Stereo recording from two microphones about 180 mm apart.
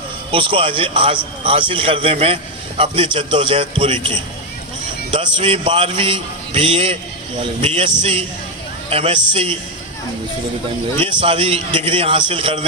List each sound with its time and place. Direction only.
0.3 s a man's voice: 30° right (ahead or behind)
5.1 s a man's voice: 30° right (ahead or behind)
8.0 s a man's voice: 35° right (ahead or behind)
11.0 s a man's voice: 30° right (ahead or behind)